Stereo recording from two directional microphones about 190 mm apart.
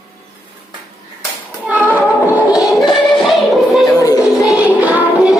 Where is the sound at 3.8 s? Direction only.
20° left (ahead or behind).